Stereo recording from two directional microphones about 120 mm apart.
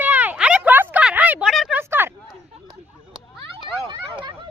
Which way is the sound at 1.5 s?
Centre (ahead or behind).